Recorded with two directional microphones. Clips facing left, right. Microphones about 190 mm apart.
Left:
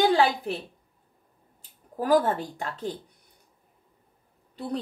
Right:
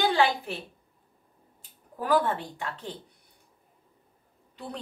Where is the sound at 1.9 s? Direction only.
40° left (ahead or behind).